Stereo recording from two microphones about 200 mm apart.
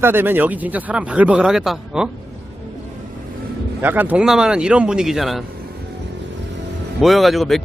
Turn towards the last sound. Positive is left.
turn(degrees=0)  # may be behind; listen again after turning